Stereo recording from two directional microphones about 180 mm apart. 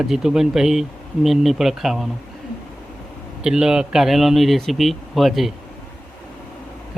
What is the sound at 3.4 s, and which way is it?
Speech, 5° right (ahead or behind).